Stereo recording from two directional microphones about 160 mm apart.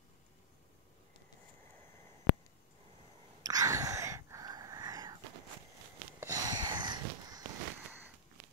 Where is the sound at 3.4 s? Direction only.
20° right (ahead or behind).